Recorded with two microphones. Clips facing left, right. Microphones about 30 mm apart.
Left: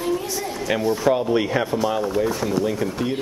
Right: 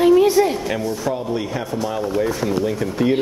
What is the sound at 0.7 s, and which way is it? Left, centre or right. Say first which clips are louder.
Speech: left 3 dB; left.